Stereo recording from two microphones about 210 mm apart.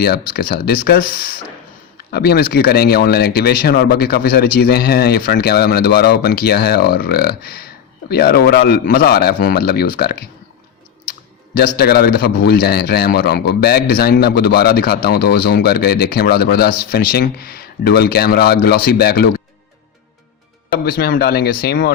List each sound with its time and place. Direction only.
0.0 s a man's voice: 45° left (ahead or behind)
11.5 s a man's voice: 45° left (ahead or behind)
20.8 s a man's voice: 45° left (ahead or behind)